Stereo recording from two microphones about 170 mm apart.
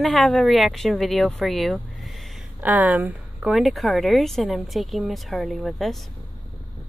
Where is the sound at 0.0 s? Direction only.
Centre (ahead or behind).